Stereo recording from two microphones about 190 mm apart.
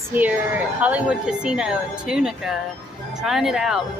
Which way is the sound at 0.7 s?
5° right (ahead or behind).